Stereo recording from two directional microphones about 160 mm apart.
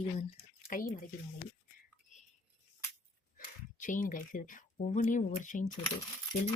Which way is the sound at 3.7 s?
55° left (ahead or behind).